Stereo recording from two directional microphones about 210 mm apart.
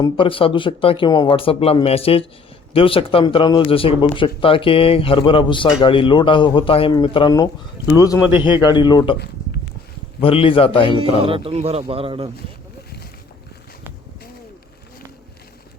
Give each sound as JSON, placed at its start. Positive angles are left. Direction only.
{"t": 0.0, "sound": "speech", "side_deg": 25}
{"t": 10.2, "sound": "speech", "side_deg": 25}
{"t": 11.2, "sound": "speech", "side_deg": -25}